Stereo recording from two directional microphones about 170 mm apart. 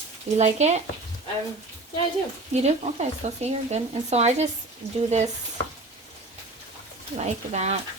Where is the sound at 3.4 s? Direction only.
40° right (ahead or behind).